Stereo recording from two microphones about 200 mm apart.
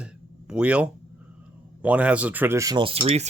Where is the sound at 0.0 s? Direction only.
5° right (ahead or behind).